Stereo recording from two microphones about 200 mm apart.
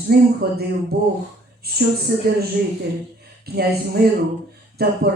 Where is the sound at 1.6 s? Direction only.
50° right (ahead or behind).